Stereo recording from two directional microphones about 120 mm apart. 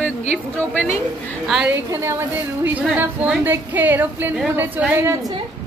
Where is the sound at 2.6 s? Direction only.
15° right (ahead or behind).